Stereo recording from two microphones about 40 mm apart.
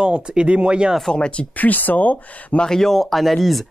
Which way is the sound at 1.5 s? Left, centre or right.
Left.